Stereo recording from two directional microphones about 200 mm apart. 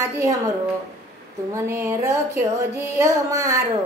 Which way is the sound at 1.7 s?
15° right (ahead or behind).